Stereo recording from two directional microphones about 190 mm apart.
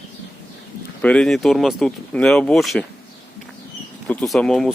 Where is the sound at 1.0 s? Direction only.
5° left (ahead or behind).